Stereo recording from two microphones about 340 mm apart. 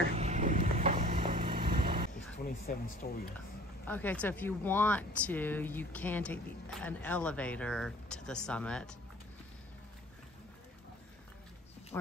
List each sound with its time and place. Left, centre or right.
0.1 s a sound: centre
1.5 s vehicle: right
2.4 s speech: left
3.8 s speech: centre
11.9 s speech: centre